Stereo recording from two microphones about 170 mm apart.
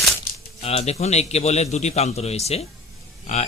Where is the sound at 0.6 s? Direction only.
35° left (ahead or behind).